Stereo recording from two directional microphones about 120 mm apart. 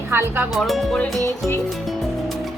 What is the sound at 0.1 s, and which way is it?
Speech, 20° right (ahead or behind).